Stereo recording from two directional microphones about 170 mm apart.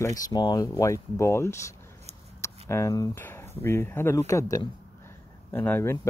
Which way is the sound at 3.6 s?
15° left (ahead or behind).